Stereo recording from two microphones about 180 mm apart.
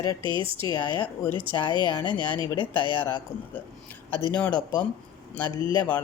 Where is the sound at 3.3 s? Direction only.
10° left (ahead or behind).